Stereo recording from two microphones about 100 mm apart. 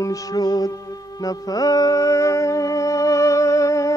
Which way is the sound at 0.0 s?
35° left (ahead or behind).